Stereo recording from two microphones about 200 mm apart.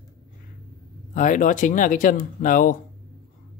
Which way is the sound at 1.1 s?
40° left (ahead or behind).